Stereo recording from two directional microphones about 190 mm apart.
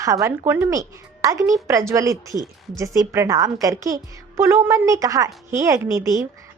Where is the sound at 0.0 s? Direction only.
15° right (ahead or behind).